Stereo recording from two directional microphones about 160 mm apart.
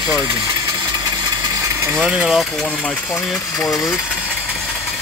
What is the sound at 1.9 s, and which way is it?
Speech, 5° right (ahead or behind).